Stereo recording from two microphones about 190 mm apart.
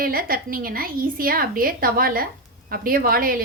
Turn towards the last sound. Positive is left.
turn(degrees=-50)  # may be behind; listen again after turning